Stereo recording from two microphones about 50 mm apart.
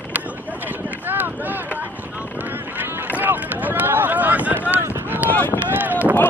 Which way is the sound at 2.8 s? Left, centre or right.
Right.